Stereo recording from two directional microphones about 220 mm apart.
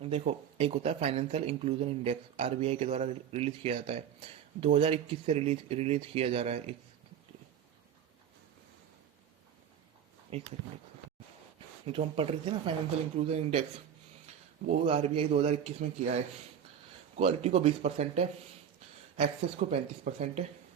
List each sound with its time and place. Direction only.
0.0 s speech: 25° right (ahead or behind)
10.3 s speech: 25° right (ahead or behind)
11.9 s speech: 25° right (ahead or behind)
14.7 s speech: 30° right (ahead or behind)